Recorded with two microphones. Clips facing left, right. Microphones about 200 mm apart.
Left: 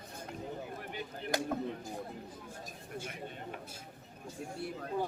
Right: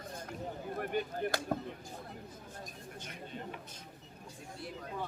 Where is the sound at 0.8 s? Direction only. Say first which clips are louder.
Right 7 dB; 50° right (ahead or behind).